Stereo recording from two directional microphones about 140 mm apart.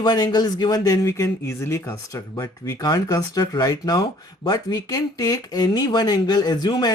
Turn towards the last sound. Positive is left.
turn(degrees=30)  # may be behind; listen again after turning